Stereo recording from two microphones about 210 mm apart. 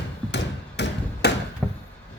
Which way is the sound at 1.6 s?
10° left (ahead or behind).